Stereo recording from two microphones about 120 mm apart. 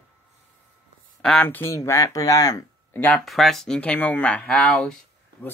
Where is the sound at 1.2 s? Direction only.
10° left (ahead or behind).